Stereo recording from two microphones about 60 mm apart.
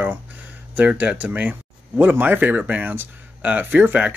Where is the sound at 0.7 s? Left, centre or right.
Right.